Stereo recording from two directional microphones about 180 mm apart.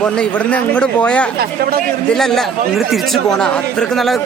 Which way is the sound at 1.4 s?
55° right (ahead or behind).